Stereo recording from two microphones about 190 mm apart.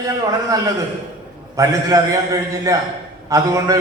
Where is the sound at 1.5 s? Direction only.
15° right (ahead or behind).